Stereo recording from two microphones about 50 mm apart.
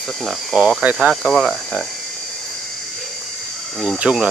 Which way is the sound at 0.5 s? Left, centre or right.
Centre.